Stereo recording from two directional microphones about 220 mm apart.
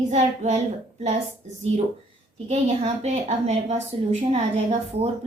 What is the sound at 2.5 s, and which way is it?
A woman's voice, 30° right (ahead or behind).